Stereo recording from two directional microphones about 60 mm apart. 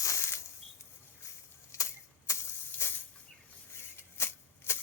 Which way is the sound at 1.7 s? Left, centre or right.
Left.